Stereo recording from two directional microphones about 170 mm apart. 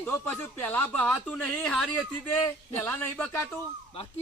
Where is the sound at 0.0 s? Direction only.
15° left (ahead or behind).